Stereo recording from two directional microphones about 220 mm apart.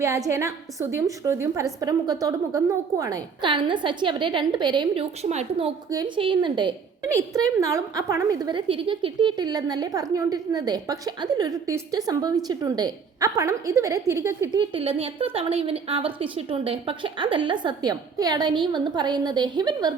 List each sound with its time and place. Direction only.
0.0 s a woman's voice: 15° right (ahead or behind)
14.7 s a woman's voice: 25° right (ahead or behind)